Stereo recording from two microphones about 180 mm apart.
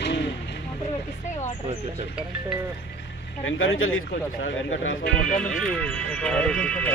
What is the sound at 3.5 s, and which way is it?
Speech, 90° left.